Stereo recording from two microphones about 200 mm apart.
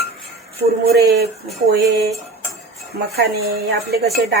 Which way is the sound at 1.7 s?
55° right (ahead or behind).